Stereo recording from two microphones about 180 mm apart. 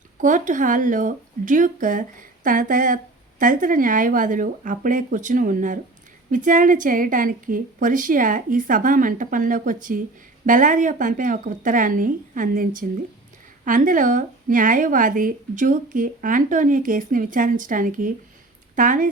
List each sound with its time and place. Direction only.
0.2 s speech: 45° right (ahead or behind)